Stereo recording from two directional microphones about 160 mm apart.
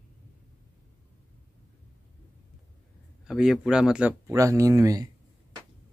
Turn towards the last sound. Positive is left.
turn(degrees=-20)  # may be behind; listen again after turning